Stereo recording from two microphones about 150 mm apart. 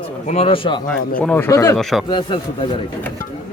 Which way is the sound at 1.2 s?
10° left (ahead or behind).